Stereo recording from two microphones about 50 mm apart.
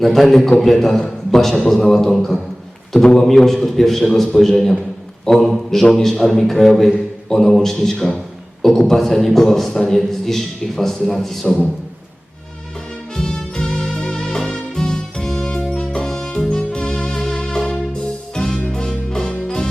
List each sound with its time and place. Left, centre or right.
0.0 s a man's voice: centre
3.2 s a man's voice: centre
13.1 s music: centre